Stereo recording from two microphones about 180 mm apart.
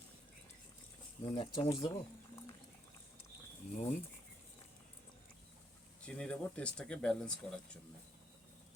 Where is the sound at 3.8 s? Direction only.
40° left (ahead or behind).